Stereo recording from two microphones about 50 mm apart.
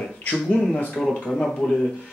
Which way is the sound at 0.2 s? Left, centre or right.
Left.